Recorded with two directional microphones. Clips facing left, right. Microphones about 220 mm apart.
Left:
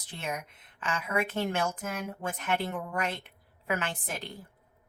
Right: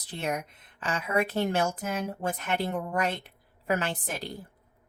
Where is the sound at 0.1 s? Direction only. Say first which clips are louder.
Right 5 dB; 35° right (ahead or behind).